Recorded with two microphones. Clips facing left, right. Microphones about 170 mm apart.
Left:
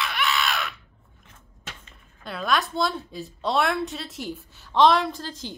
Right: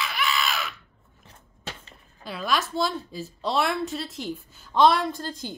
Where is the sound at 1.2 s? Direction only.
35° right (ahead or behind).